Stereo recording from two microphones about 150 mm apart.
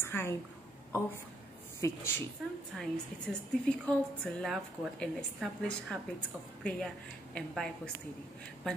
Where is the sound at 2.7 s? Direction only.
5° left (ahead or behind).